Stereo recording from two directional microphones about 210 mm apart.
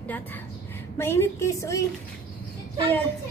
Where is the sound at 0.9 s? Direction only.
10° left (ahead or behind).